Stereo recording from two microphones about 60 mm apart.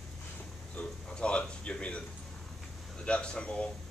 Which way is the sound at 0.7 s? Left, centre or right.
Centre.